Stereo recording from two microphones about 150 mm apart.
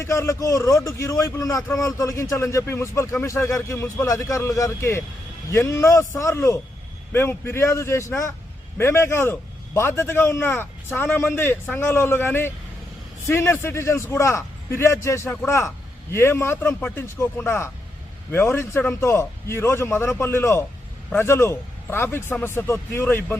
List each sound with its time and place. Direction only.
0.0 s a man's voice: 20° left (ahead or behind)